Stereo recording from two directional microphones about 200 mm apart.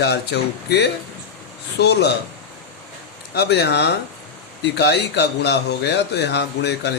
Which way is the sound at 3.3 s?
55° left (ahead or behind).